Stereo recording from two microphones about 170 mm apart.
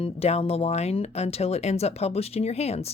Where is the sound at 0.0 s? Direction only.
40° left (ahead or behind).